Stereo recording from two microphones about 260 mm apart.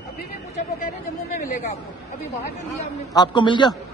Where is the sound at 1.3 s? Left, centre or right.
Left.